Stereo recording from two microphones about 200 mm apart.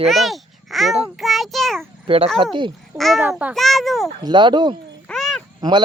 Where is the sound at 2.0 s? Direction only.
30° right (ahead or behind).